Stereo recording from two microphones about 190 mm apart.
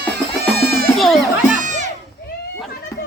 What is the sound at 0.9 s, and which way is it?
Music, centre (ahead or behind).